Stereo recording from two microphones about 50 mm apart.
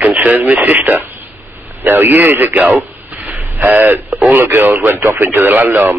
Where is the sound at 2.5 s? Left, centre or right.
Right.